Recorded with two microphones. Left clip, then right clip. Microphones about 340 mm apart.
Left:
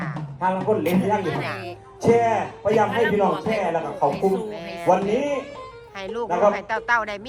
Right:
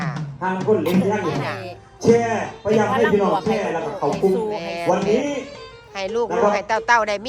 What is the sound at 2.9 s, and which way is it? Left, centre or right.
A woman's voice, centre.